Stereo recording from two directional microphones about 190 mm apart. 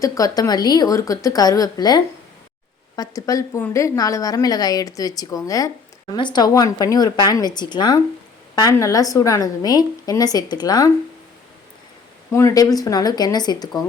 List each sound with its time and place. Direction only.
0.0 s a woman's voice: 20° left (ahead or behind)
12.3 s a woman's voice: 15° left (ahead or behind)